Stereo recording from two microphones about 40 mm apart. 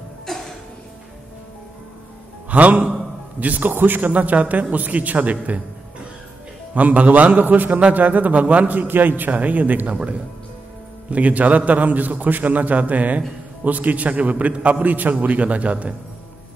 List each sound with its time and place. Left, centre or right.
0.3 s a sound: centre
2.5 s a man's voice: right
3.7 s a man's voice: right
4.1 s a man's voice: right
7.4 s a man's voice: right
11.1 s a man's voice: right